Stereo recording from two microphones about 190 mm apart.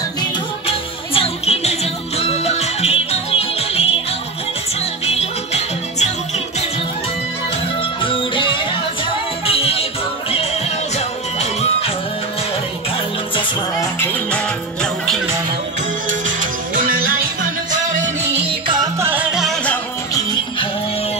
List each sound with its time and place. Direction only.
0.7 s music: 30° left (ahead or behind)
5.0 s music: 35° left (ahead or behind)
8.0 s music: 25° left (ahead or behind)
13.7 s music: 10° left (ahead or behind)
16.1 s music: 45° right (ahead or behind)
18.5 s music: 25° right (ahead or behind)
18.9 s music: 10° right (ahead or behind)